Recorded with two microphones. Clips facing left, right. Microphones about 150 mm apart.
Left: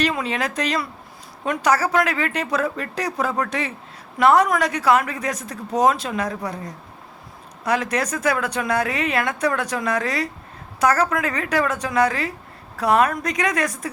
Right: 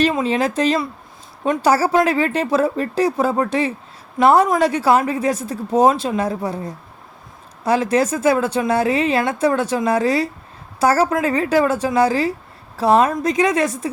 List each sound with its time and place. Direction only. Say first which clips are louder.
0.0 s a woman's voice: right 5 dB; 25° right (ahead or behind)